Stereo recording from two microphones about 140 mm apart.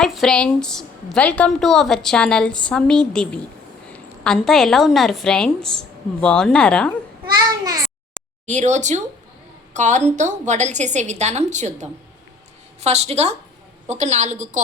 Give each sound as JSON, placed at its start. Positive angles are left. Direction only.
{"t": 0.0, "sound": "a woman's voice", "side_deg": 0}
{"t": 7.3, "sound": "a child's voice", "side_deg": -25}
{"t": 8.4, "sound": "a woman's voice", "side_deg": -55}